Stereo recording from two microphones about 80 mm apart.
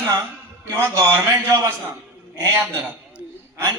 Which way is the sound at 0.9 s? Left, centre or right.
Right.